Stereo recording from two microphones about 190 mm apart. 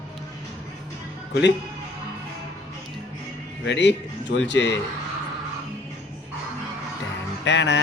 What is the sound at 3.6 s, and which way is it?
Speech, 70° left (ahead or behind).